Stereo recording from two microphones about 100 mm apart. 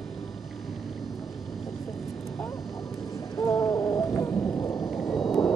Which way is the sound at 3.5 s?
Centre (ahead or behind).